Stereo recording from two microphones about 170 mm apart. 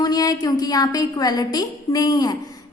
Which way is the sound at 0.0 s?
25° left (ahead or behind).